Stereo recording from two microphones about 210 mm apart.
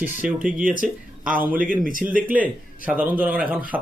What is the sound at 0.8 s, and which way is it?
A man's voice, 40° right (ahead or behind).